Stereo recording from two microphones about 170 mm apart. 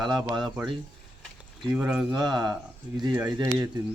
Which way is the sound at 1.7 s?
10° right (ahead or behind).